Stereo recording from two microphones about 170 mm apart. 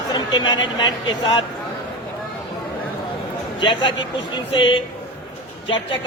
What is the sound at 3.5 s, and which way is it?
A man's voice, 30° left (ahead or behind).